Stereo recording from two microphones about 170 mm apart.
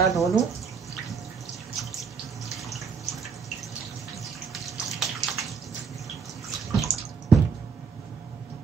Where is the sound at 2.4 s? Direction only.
Centre (ahead or behind).